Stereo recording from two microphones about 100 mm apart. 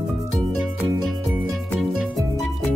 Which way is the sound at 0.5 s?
Centre (ahead or behind).